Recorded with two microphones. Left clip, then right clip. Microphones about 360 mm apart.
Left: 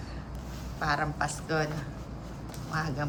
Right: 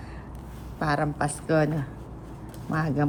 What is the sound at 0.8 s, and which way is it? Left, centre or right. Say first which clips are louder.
Speech: right 3 dB; centre.